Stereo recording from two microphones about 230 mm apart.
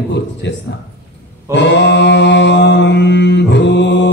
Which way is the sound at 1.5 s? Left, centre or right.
Left.